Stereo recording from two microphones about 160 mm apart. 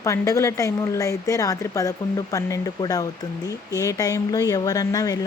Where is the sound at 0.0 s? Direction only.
20° left (ahead or behind).